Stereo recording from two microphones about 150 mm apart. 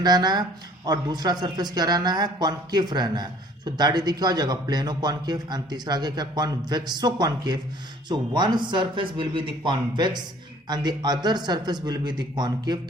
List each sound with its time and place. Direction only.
0.0 s speech: 25° right (ahead or behind)